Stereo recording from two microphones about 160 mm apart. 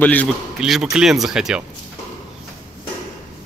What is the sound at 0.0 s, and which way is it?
Speech, 10° left (ahead or behind).